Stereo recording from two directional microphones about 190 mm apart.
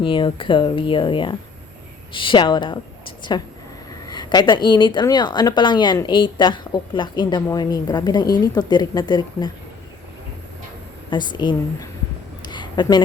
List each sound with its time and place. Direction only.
0.0 s a woman's voice: 25° left (ahead or behind)
4.1 s a woman's voice: 20° left (ahead or behind)
11.1 s a woman's voice: 25° left (ahead or behind)
12.5 s a sound: 25° left (ahead or behind)